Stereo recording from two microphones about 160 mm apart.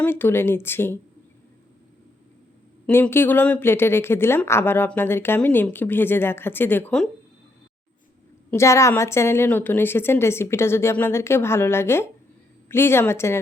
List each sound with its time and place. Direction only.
0.0 s speech: 15° left (ahead or behind)
2.8 s speech: 10° left (ahead or behind)
8.4 s speech: 20° left (ahead or behind)